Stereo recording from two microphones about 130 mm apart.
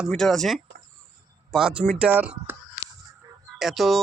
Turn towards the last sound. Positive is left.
turn(degrees=0)  # may be behind; listen again after turning